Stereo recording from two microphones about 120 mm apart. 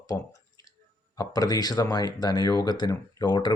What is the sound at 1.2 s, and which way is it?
Speech, 30° left (ahead or behind).